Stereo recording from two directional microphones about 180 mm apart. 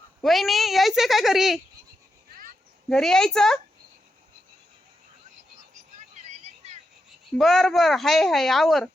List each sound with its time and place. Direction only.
0.2 s speech: centre (ahead or behind)
2.9 s speech: 5° left (ahead or behind)
6.2 s a sound: 40° right (ahead or behind)
7.3 s speech: centre (ahead or behind)